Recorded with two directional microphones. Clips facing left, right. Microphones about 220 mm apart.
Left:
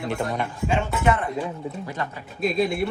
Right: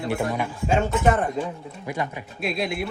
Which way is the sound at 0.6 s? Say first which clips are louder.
Right 2 dB; 45° right (ahead or behind).